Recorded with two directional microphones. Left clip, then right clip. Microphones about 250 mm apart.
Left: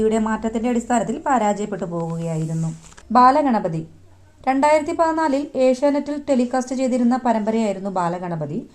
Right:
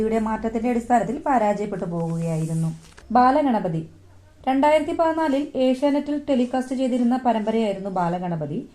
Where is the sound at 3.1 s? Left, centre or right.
Left.